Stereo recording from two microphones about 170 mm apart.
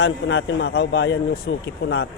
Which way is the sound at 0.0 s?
90° left.